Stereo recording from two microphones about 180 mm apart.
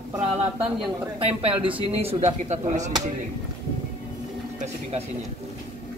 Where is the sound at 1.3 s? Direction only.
30° right (ahead or behind).